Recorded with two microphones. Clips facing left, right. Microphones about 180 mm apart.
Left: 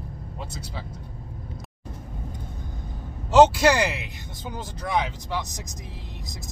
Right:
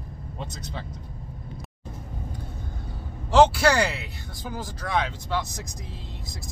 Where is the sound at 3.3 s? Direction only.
20° left (ahead or behind).